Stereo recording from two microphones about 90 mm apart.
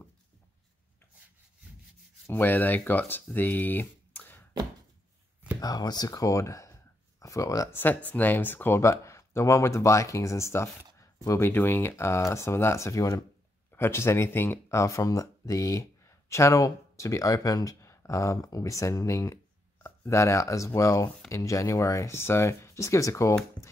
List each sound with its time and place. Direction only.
2.2 s speech: 20° left (ahead or behind)
5.6 s speech: 45° left (ahead or behind)
7.7 s speech: 20° left (ahead or behind); by 13.2 s 35° left (ahead or behind)
13.7 s speech: 25° left (ahead or behind)